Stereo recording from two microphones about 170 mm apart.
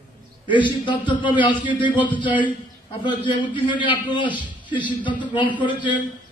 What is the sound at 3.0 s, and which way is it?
A man's voice, 25° left (ahead or behind).